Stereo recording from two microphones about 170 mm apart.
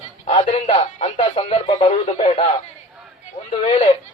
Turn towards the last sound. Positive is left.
turn(degrees=35)  # may be behind; listen again after turning